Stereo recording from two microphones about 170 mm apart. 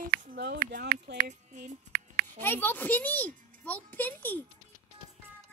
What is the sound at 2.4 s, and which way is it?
A child's voice, 10° left (ahead or behind).